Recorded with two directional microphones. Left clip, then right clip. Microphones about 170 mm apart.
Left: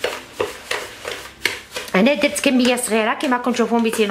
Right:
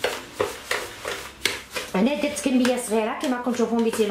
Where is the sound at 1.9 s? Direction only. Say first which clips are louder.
Left 8 dB; 20° left (ahead or behind).